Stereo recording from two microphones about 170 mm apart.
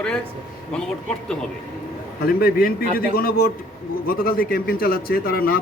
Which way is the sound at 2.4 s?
60° left (ahead or behind).